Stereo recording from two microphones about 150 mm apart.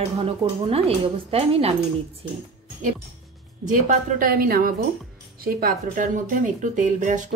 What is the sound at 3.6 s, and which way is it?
A woman's voice, 55° right (ahead or behind).